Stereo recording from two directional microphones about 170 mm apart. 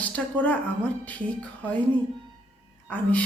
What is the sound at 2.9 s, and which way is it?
Speech, 10° left (ahead or behind).